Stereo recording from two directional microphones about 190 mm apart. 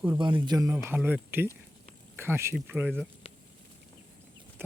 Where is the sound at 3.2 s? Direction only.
30° left (ahead or behind).